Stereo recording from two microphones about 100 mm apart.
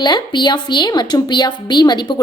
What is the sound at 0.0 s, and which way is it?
A woman's voice, 45° left (ahead or behind).